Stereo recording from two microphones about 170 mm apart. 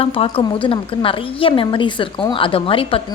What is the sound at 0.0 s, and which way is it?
A woman's voice, 35° left (ahead or behind).